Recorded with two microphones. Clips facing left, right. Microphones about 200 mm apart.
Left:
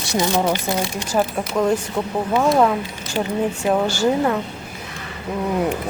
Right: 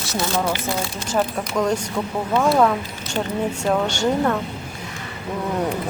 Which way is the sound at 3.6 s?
5° left (ahead or behind).